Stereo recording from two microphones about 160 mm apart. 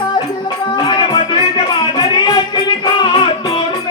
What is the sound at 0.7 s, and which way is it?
Music, 30° left (ahead or behind).